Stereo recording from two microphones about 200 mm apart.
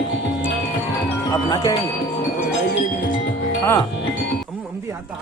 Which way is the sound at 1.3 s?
20° left (ahead or behind).